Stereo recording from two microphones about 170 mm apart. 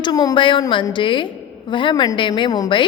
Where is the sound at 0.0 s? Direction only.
25° left (ahead or behind).